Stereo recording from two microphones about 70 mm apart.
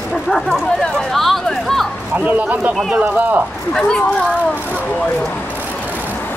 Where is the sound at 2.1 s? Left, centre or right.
Right.